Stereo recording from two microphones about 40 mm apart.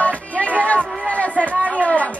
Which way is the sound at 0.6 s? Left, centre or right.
Left.